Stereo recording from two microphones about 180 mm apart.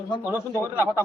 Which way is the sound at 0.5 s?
15° left (ahead or behind).